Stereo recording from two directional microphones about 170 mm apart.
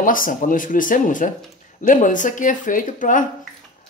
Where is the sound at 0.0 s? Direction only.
55° left (ahead or behind).